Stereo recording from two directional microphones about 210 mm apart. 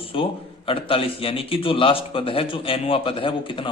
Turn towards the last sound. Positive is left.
turn(degrees=25)  # may be behind; listen again after turning